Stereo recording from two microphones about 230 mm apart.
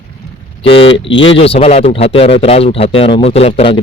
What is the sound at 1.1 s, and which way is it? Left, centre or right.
Speech, left.